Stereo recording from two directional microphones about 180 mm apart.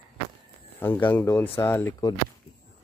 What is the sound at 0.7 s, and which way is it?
Speech, 10° left (ahead or behind).